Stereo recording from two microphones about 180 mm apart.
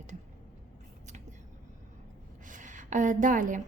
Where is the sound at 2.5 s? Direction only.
45° right (ahead or behind).